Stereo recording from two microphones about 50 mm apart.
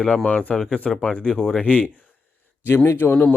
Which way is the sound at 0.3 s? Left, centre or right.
Left.